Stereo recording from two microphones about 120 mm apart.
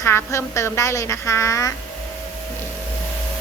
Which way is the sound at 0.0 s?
20° left (ahead or behind).